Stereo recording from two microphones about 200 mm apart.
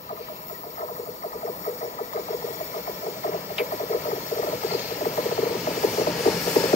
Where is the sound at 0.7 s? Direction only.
35° left (ahead or behind).